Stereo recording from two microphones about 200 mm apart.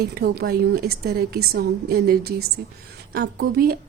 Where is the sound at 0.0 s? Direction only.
50° right (ahead or behind).